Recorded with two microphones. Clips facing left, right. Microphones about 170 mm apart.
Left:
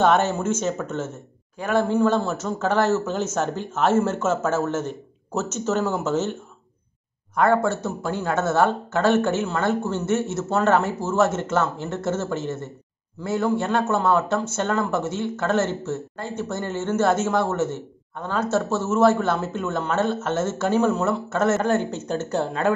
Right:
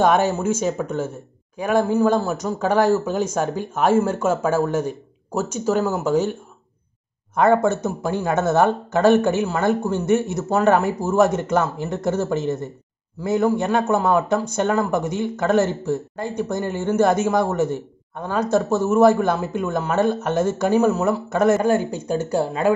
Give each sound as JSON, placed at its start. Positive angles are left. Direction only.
{"t": 0.0, "sound": "speech", "side_deg": -10}
{"t": 7.3, "sound": "speech", "side_deg": -20}